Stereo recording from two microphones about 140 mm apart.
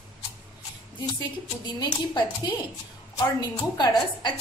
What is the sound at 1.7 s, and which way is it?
Speech, 30° left (ahead or behind).